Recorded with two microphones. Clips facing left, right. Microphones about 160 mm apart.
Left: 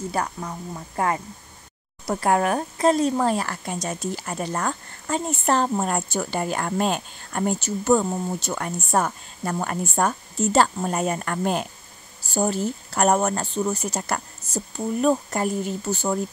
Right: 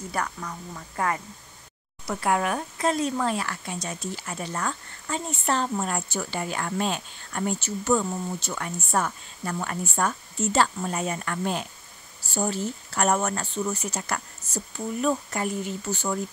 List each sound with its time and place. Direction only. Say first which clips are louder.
0.1 s speech: left 3 dB; 30° left (ahead or behind)
2.0 s speech: left 4 dB; 40° left (ahead or behind)